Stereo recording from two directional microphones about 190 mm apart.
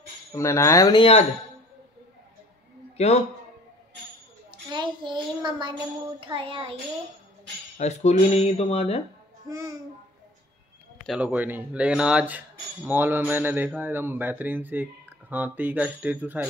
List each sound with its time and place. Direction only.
0.3 s speech: 15° left (ahead or behind)
4.5 s a child's voice: 25° right (ahead or behind)
7.7 s speech: 35° left (ahead or behind)
9.5 s a child's voice: 20° right (ahead or behind)
11.1 s speech: 5° right (ahead or behind)